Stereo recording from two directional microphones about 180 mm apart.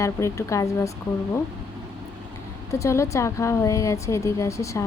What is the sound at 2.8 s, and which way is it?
A woman's voice, 15° left (ahead or behind).